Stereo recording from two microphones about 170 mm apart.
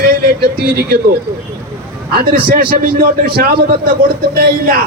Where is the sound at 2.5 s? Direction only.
60° right (ahead or behind).